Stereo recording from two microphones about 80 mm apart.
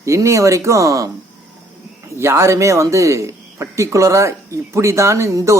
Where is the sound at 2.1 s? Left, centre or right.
Right.